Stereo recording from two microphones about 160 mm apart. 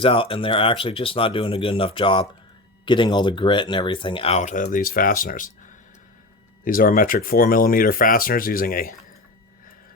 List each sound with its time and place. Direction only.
0.0 s speech: 35° left (ahead or behind); by 9.0 s 65° left (ahead or behind)